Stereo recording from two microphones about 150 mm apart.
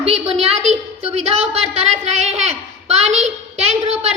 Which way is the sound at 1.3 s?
45° right (ahead or behind).